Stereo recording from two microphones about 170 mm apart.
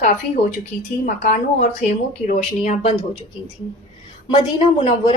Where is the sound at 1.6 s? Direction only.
50° left (ahead or behind).